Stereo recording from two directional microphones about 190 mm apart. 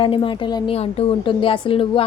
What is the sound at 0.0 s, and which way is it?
A woman's voice, 25° left (ahead or behind).